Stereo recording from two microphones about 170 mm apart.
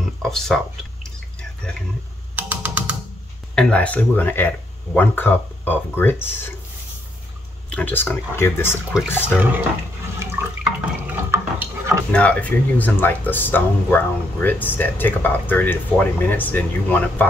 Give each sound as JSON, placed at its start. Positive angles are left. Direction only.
{"t": 0.2, "sound": "speech", "side_deg": 0}
{"t": 2.3, "sound": "typing", "side_deg": -10}
{"t": 3.5, "sound": "speech", "side_deg": 5}
{"t": 7.7, "sound": "speech", "side_deg": 10}
{"t": 9.4, "sound": "speech", "side_deg": -10}
{"t": 10.1, "sound": "drip", "side_deg": -10}
{"t": 12.1, "sound": "speech", "side_deg": 10}